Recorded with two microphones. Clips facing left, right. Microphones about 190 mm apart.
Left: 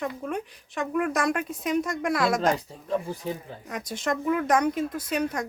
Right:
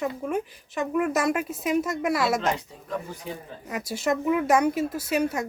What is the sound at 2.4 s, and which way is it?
Speech, 40° left (ahead or behind).